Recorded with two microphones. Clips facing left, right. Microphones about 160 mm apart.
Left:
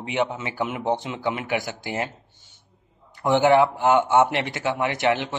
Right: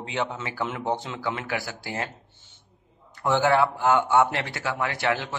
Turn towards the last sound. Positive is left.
turn(degrees=20)  # may be behind; listen again after turning